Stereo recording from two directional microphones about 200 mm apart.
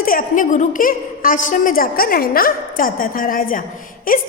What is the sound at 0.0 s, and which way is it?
A woman's voice, 45° left (ahead or behind).